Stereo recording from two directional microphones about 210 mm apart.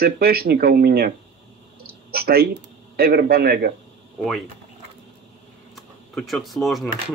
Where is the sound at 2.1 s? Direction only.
45° right (ahead or behind).